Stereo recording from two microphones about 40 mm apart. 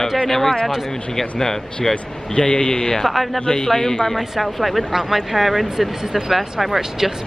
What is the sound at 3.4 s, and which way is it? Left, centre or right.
Speech, left.